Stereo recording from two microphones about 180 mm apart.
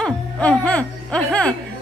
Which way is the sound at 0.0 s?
5° left (ahead or behind).